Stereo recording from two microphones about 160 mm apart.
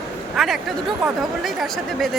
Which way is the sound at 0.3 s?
Centre (ahead or behind).